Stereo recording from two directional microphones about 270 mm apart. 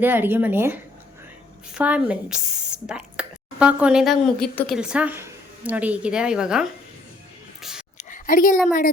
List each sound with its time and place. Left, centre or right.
0.0 s a woman's voice: centre
7.6 s whispering: centre
7.9 s a sound: left